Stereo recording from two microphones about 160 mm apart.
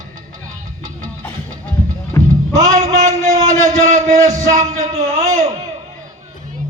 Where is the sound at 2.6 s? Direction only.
20° right (ahead or behind).